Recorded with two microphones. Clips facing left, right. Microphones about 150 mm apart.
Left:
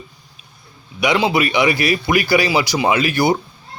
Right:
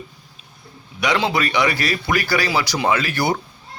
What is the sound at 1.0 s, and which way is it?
Speech, 10° left (ahead or behind).